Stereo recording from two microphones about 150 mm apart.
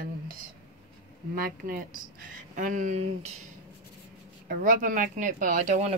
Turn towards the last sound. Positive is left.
turn(degrees=-55)  # may be behind; listen again after turning